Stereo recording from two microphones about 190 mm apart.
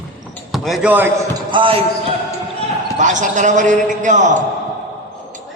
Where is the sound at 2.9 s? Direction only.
40° right (ahead or behind).